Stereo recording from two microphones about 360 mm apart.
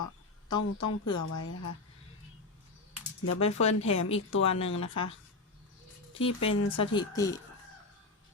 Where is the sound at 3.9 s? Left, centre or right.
Left.